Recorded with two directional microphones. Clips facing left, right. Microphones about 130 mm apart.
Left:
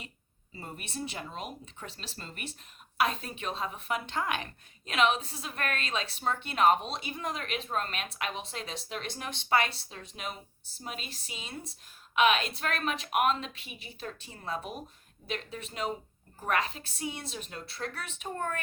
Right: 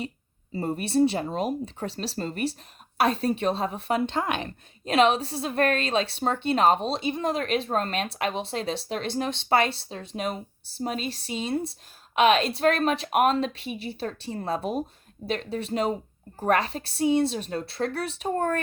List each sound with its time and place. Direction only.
0.5 s speech: 35° right (ahead or behind)